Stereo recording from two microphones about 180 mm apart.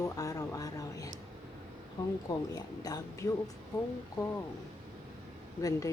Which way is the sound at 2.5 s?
20° left (ahead or behind).